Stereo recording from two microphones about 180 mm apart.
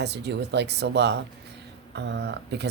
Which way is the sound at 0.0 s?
70° right (ahead or behind).